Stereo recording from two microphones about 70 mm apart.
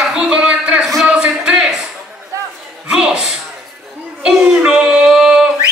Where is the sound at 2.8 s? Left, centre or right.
Centre.